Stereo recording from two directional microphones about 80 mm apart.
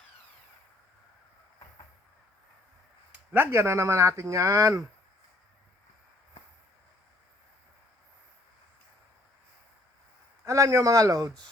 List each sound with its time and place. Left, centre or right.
3.3 s speech: right
10.4 s speech: right